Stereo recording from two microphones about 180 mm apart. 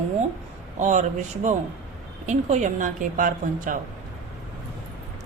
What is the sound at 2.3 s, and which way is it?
A woman's voice, 40° right (ahead or behind).